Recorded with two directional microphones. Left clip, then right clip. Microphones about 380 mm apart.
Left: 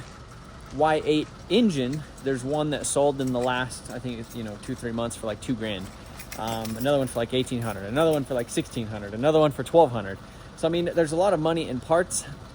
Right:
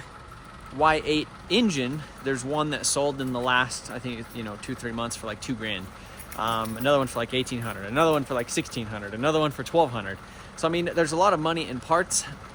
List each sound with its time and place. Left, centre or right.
0.8 s speech: centre